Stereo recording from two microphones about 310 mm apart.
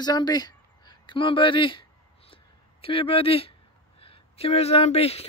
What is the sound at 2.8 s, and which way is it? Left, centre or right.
Speech, centre.